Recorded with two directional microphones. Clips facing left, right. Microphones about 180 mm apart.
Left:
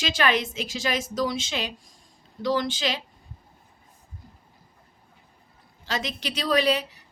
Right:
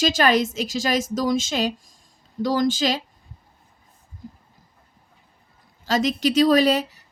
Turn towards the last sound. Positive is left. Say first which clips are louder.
# right 7 dB
turn(degrees=-45)  # may be behind; listen again after turning